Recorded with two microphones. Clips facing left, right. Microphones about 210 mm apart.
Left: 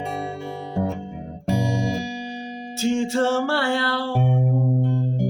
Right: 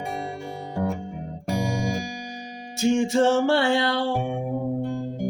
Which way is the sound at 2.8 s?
20° right (ahead or behind).